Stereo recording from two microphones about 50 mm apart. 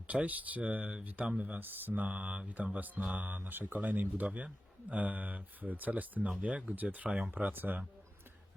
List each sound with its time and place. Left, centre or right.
0.1 s speech: right
7.5 s speech: right